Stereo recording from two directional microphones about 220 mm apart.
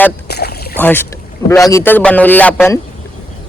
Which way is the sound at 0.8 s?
10° left (ahead or behind).